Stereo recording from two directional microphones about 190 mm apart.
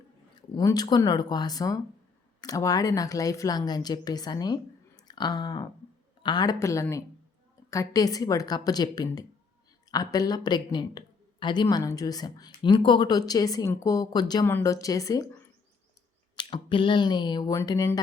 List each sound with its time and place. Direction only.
0.5 s speech: 20° left (ahead or behind)
16.3 s speech: 25° left (ahead or behind)